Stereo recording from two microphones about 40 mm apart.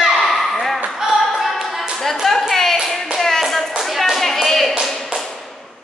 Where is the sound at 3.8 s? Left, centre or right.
Centre.